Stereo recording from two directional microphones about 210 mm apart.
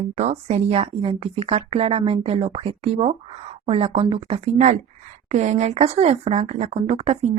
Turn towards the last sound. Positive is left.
turn(degrees=-30)  # may be behind; listen again after turning